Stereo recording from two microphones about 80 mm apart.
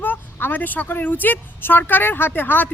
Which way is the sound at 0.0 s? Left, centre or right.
Left.